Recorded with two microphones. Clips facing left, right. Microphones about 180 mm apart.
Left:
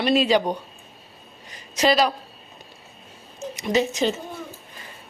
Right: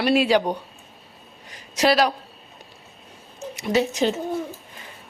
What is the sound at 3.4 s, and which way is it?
Speech, 10° right (ahead or behind).